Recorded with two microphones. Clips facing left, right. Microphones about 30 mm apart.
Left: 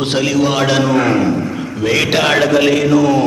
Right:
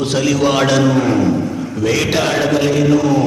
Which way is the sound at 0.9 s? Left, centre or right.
Left.